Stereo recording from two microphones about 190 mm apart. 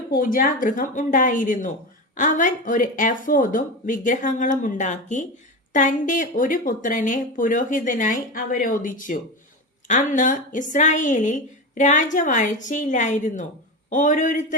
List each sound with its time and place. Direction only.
0.2 s a woman's voice: 45° left (ahead or behind)